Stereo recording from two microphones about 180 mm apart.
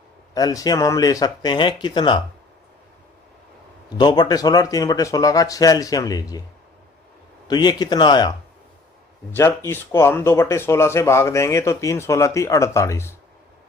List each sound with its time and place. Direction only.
0.3 s speech: 20° left (ahead or behind)
3.9 s speech: 25° left (ahead or behind)
7.4 s speech: 25° left (ahead or behind)
9.6 s speech: 15° left (ahead or behind)